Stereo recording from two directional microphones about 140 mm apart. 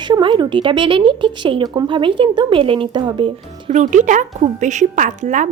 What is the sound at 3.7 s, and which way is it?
A woman's voice, 60° right (ahead or behind).